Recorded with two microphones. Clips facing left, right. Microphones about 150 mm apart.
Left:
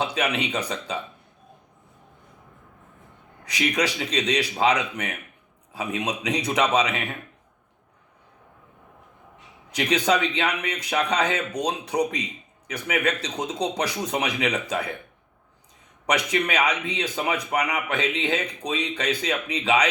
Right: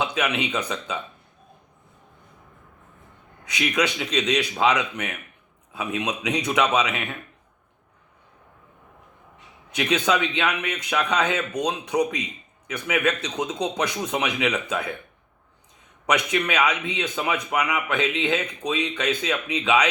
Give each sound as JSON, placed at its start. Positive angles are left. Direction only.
{"t": 0.0, "sound": "speech", "side_deg": 35}
{"t": 3.4, "sound": "a man's voice", "side_deg": 35}
{"t": 9.7, "sound": "a man's voice", "side_deg": 35}
{"t": 16.0, "sound": "a man's voice", "side_deg": 35}